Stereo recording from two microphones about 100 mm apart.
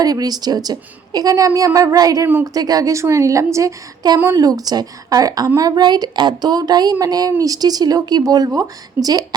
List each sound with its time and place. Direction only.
0.0 s a woman's voice: 40° right (ahead or behind)